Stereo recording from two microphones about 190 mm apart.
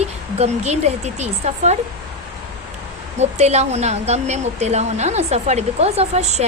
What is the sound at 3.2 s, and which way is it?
Speech, 35° right (ahead or behind).